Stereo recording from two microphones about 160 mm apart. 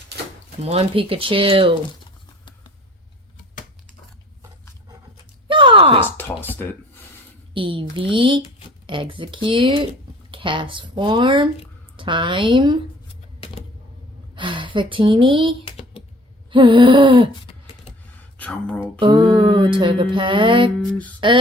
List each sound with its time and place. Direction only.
0.6 s music: 40° right (ahead or behind)
5.5 s a sound: 30° right (ahead or behind)
6.1 s speech: 15° left (ahead or behind)
7.5 s music: 30° right (ahead or behind)
14.3 s a woman's voice: 30° right (ahead or behind)
15.6 s computer keyboard: 35° left (ahead or behind)
16.5 s music: 30° right (ahead or behind)
18.3 s speech: 10° left (ahead or behind)
18.9 s music: 30° right (ahead or behind)